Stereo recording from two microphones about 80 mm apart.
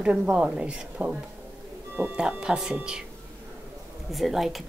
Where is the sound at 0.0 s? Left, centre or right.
Centre.